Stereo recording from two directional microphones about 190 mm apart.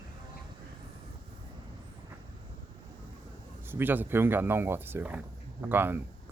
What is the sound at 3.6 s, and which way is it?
Speech, 10° right (ahead or behind).